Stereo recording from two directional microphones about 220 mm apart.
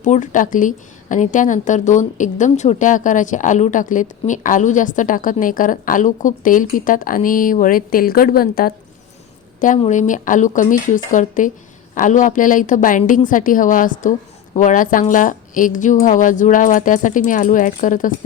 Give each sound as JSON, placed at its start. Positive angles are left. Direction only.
{"t": 0.0, "sound": "speech", "side_deg": 35}